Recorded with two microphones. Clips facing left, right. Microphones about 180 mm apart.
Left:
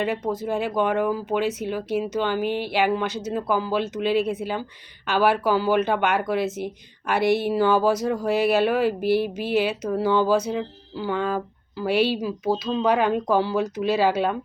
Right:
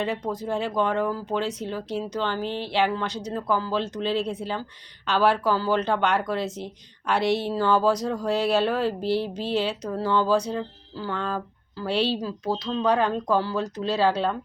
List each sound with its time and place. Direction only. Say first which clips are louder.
0.4 s speech: left 1 dB; 15° left (ahead or behind)
7.2 s speech: left 4 dB; 55° left (ahead or behind)
7.4 s speech: left 2 dB; 10° left (ahead or behind)